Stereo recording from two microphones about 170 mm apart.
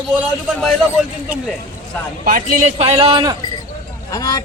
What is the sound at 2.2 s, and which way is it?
Speech, 50° right (ahead or behind).